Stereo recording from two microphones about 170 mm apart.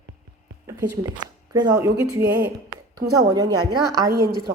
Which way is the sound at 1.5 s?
25° right (ahead or behind).